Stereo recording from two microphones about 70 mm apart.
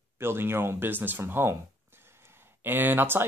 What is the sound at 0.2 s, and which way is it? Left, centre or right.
Speech, right.